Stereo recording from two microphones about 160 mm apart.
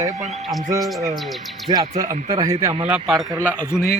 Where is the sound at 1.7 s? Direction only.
25° right (ahead or behind).